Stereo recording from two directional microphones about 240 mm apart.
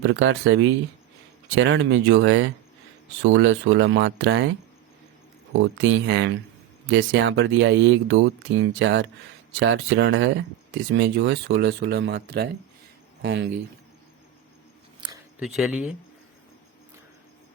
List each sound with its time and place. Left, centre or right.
0.0 s speech: right
5.5 s speech: right
15.4 s speech: centre